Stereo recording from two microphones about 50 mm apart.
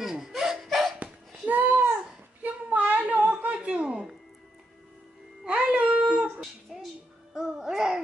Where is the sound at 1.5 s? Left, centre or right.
Right.